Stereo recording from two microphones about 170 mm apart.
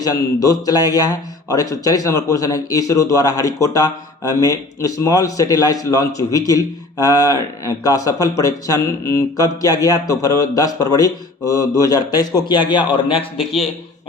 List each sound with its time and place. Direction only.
0.0 s speech: 20° left (ahead or behind)